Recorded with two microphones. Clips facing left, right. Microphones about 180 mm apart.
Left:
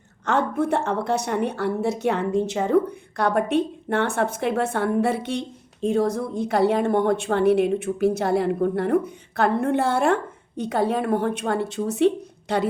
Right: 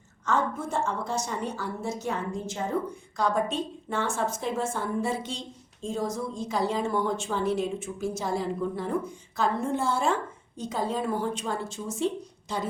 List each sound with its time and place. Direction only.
0.3 s a woman's voice: 65° left (ahead or behind)